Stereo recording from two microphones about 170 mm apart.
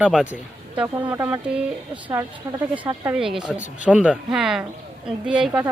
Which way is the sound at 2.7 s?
10° right (ahead or behind).